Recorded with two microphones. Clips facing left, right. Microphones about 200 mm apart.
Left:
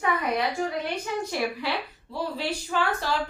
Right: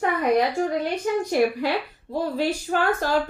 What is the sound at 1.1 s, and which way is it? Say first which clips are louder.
A woman's voice: right 8 dB; 45° right (ahead or behind).